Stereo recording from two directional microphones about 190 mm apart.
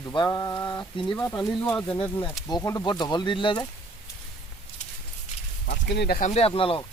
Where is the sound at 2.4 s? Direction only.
20° left (ahead or behind).